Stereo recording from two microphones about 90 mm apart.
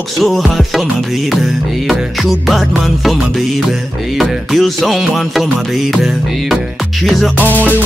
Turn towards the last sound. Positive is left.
turn(degrees=20)  # may be behind; listen again after turning